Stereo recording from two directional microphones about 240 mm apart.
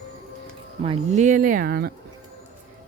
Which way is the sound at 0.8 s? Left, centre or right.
Right.